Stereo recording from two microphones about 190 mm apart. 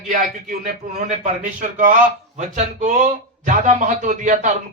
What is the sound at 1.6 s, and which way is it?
Speech, 40° right (ahead or behind).